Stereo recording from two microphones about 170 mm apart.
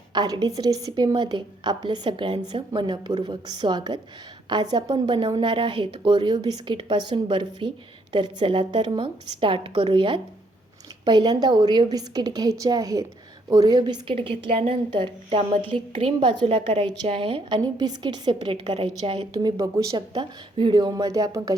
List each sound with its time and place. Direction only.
0.1 s a woman's voice: 25° right (ahead or behind)